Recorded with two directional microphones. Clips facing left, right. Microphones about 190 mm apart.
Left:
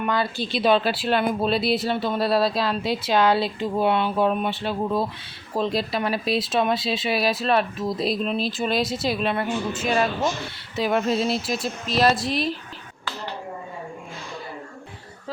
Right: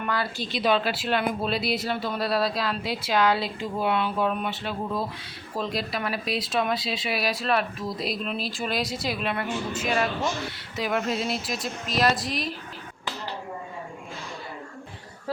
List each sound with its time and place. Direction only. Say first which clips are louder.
0.0 s speech: left 4 dB; 20° left (ahead or behind)